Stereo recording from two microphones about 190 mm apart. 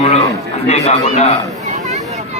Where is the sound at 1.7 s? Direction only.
40° right (ahead or behind).